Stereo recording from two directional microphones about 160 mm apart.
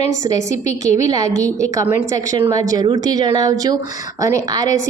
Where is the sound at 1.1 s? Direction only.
20° right (ahead or behind).